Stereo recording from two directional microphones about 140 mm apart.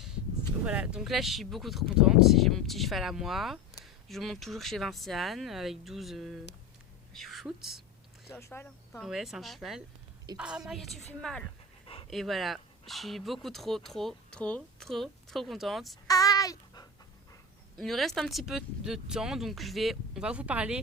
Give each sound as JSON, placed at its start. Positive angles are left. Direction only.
{"t": 0.6, "sound": "a woman's voice", "side_deg": -10}
{"t": 8.3, "sound": "speech", "side_deg": 20}
{"t": 8.9, "sound": "speech", "side_deg": 0}
{"t": 16.0, "sound": "babbling", "side_deg": 25}
{"t": 17.7, "sound": "speech", "side_deg": 0}